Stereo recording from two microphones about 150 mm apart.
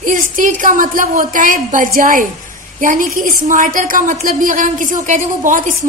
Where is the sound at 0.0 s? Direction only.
60° right (ahead or behind).